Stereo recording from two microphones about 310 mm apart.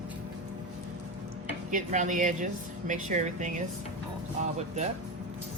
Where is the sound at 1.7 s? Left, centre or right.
Right.